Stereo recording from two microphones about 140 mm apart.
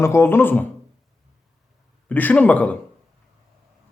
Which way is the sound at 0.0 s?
20° left (ahead or behind).